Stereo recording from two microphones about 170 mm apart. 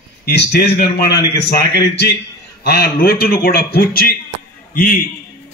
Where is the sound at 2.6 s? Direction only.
70° left (ahead or behind).